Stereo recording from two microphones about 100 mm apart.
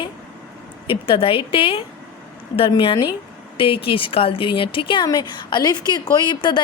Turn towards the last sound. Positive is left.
turn(degrees=50)  # may be behind; listen again after turning